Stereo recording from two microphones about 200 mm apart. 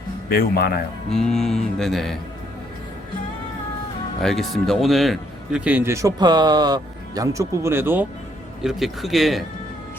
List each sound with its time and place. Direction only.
0.3 s speech: 50° left (ahead or behind)
1.1 s mantra: centre (ahead or behind)
4.2 s speech: centre (ahead or behind)
8.6 s mantra: centre (ahead or behind)